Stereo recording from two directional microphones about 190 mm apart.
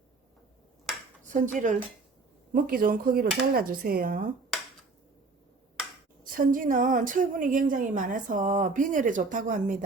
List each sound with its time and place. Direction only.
1.3 s a woman's voice: 40° right (ahead or behind)
6.2 s a woman's voice: 45° right (ahead or behind)